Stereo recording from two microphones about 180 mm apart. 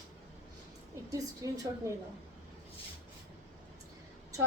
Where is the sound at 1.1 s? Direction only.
20° right (ahead or behind).